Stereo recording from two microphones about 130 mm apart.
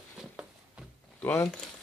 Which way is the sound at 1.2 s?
20° left (ahead or behind).